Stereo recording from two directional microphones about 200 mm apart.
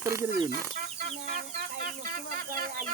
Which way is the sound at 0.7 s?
45° right (ahead or behind).